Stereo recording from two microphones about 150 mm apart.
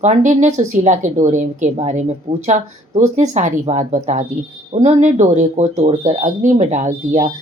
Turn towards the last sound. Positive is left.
turn(degrees=-55)  # may be behind; listen again after turning